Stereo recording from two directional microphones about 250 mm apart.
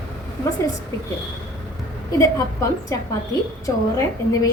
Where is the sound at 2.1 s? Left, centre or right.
Centre.